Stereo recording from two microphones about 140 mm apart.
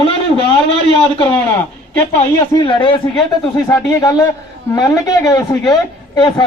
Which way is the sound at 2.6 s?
35° left (ahead or behind).